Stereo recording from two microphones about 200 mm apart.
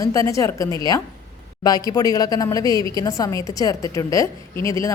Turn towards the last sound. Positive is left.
turn(degrees=15)  # may be behind; listen again after turning